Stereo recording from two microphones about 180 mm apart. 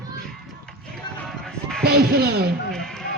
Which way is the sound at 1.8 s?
60° right (ahead or behind).